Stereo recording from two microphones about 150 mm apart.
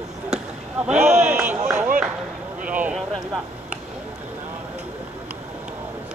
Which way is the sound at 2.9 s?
Centre (ahead or behind).